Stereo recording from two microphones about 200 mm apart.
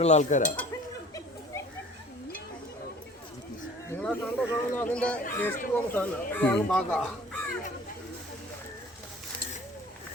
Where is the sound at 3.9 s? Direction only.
5° left (ahead or behind).